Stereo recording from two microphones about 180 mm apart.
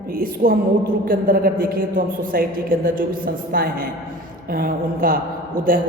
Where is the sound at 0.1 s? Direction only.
55° right (ahead or behind).